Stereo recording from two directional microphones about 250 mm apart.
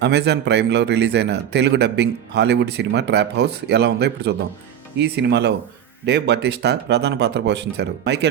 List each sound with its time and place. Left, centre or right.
0.0 s a man's voice: right